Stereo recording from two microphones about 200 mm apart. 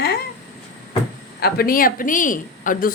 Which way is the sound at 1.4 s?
50° left (ahead or behind).